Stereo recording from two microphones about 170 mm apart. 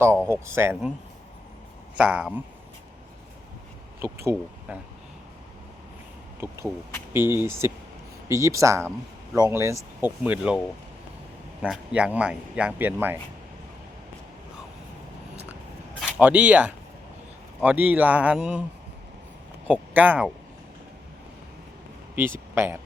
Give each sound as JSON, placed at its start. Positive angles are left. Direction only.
{"t": 0.3, "sound": "speech", "side_deg": -15}
{"t": 2.0, "sound": "speech", "side_deg": -5}
{"t": 4.0, "sound": "speech", "side_deg": -15}
{"t": 7.1, "sound": "speech", "side_deg": -15}
{"t": 11.6, "sound": "speech", "side_deg": -5}
{"t": 16.0, "sound": "speech", "side_deg": -5}
{"t": 19.6, "sound": "speech", "side_deg": -10}
{"t": 22.1, "sound": "a man's voice", "side_deg": -15}